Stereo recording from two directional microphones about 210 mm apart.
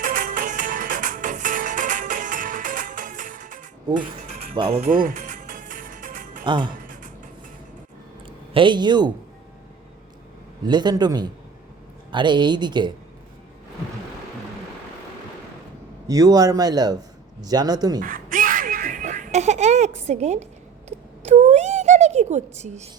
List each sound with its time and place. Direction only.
0.0 s music: 40° right (ahead or behind)
4.5 s music: 25° right (ahead or behind)
6.4 s speech: 20° right (ahead or behind)
6.8 s dishes: 40° right (ahead or behind)
8.5 s speech: 20° right (ahead or behind)
10.7 s speech: 20° right (ahead or behind)
16.0 s a man's voice: 15° right (ahead or behind)
18.0 s music: 40° right (ahead or behind)
20.0 s a woman's voice: 30° right (ahead or behind)
21.2 s a sound: 35° right (ahead or behind)